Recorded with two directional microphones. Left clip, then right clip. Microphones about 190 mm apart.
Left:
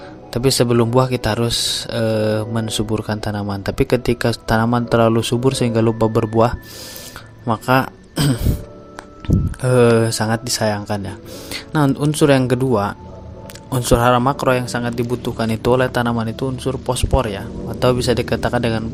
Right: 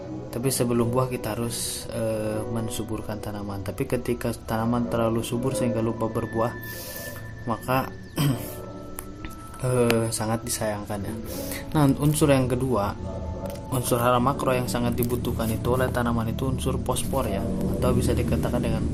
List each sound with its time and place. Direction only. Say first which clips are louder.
0.3 s speech: left 10 dB; 45° left (ahead or behind)